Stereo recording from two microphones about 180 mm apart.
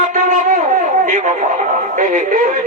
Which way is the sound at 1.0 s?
45° right (ahead or behind).